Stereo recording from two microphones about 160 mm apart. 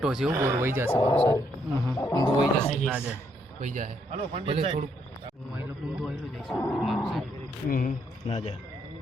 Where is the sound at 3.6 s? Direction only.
55° right (ahead or behind).